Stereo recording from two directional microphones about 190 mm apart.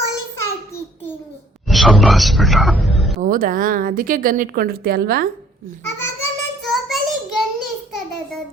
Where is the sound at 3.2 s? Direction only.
45° right (ahead or behind).